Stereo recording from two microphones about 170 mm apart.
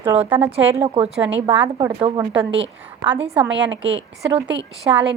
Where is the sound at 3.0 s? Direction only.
30° right (ahead or behind).